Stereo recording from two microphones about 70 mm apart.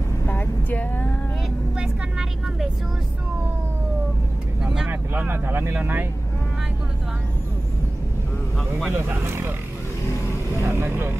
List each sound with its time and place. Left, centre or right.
0.3 s vehicle: left
1.8 s vehicle: centre
4.6 s vehicle: centre
5.1 s speech: right
8.9 s speech: right
10.6 s speech: right